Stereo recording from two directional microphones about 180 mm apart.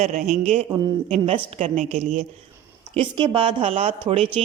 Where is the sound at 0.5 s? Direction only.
30° right (ahead or behind).